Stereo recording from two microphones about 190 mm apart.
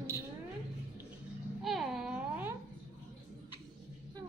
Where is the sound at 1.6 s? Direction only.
Centre (ahead or behind).